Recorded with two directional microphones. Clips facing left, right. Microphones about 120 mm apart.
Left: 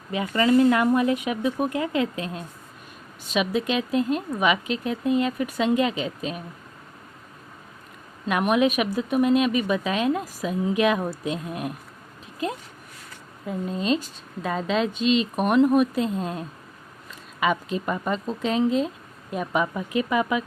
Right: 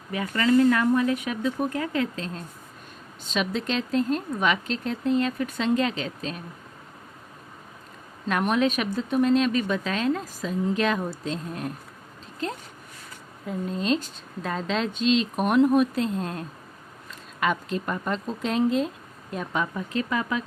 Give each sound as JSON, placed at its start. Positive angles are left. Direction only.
{"t": 0.1, "sound": "speech", "side_deg": 20}
{"t": 8.3, "sound": "speech", "side_deg": 5}